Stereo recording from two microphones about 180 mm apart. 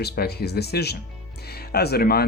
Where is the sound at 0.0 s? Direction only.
65° left (ahead or behind).